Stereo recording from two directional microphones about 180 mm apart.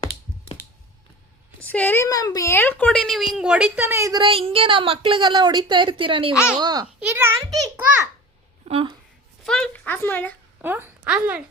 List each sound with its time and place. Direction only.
1.6 s a woman's voice: 10° left (ahead or behind); by 6.8 s 25° right (ahead or behind)
7.1 s a woman's voice: 15° right (ahead or behind)
8.6 s speech: 35° right (ahead or behind)
9.4 s a sound: 5° left (ahead or behind)
10.6 s a woman's voice: 10° right (ahead or behind)